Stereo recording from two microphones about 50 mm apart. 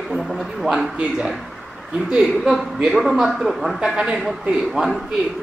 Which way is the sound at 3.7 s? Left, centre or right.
Centre.